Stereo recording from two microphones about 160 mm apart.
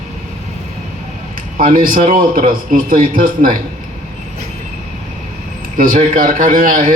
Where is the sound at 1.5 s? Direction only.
60° right (ahead or behind).